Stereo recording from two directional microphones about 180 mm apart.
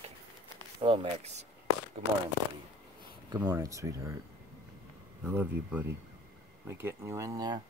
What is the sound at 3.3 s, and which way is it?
Speech, 20° right (ahead or behind).